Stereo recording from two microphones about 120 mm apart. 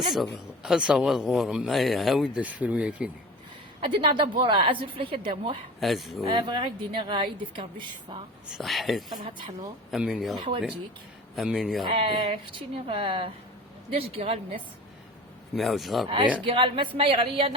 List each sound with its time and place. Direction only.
0.1 s speech: 5° right (ahead or behind)
3.8 s a woman's voice: 45° right (ahead or behind)
5.8 s speech: centre (ahead or behind)
6.5 s a woman's voice: 45° right (ahead or behind)
8.4 s speech: centre (ahead or behind)
11.3 s speech: 5° right (ahead or behind)
11.9 s a woman's voice: 45° right (ahead or behind)
15.5 s speech: centre (ahead or behind)
16.0 s a woman's voice: 45° right (ahead or behind)